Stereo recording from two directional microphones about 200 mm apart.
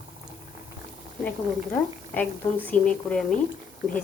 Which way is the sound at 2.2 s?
10° left (ahead or behind).